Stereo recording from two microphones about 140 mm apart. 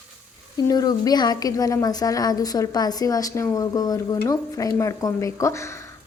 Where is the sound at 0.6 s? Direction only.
30° left (ahead or behind).